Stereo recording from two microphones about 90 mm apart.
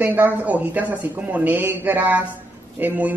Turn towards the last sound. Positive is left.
turn(degrees=-20)  # may be behind; listen again after turning